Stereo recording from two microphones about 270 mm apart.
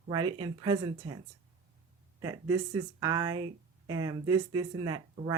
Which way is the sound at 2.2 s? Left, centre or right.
Centre.